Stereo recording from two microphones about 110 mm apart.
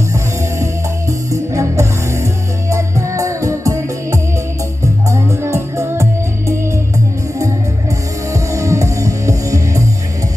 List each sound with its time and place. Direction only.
1.3 s music: 30° right (ahead or behind)
8.3 s music: 30° right (ahead or behind)